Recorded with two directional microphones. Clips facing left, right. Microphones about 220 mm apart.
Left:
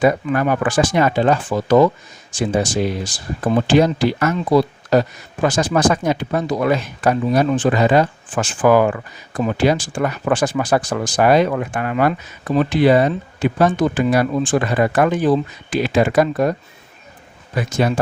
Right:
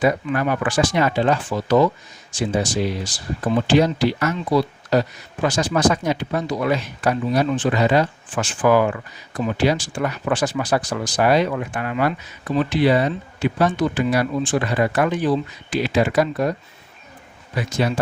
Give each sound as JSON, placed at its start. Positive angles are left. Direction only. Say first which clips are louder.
{"t": 0.0, "sound": "speech", "louder": "left 3 dB", "side_deg": 45}